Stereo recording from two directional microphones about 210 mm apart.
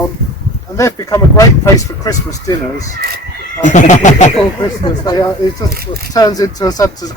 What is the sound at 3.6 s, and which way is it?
Speech, 35° left (ahead or behind).